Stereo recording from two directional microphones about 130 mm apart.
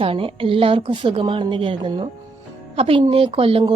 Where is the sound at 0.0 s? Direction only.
45° right (ahead or behind).